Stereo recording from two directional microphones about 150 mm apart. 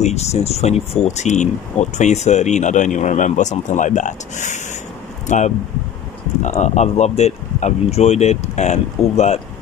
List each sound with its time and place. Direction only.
0.0 s speech: 45° left (ahead or behind)
6.4 s speech: 50° left (ahead or behind)